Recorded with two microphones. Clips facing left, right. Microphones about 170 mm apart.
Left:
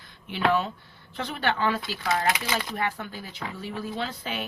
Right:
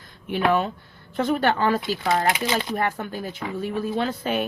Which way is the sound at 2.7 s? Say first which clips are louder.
Right 5 dB; 45° right (ahead or behind).